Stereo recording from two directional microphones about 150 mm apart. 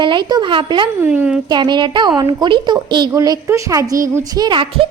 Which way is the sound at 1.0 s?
10° right (ahead or behind).